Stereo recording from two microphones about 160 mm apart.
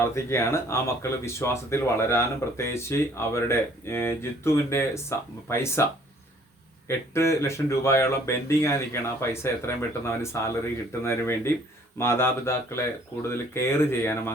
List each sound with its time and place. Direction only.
0.0 s speech: 15° left (ahead or behind)
6.8 s speech: 15° left (ahead or behind)